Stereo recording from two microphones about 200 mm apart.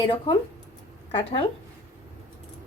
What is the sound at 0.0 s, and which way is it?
Speech, 25° left (ahead or behind).